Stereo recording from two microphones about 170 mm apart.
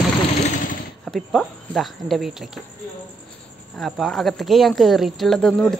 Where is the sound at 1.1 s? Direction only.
Centre (ahead or behind).